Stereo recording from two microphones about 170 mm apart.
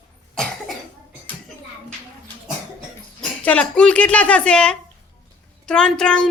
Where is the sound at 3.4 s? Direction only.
5° left (ahead or behind).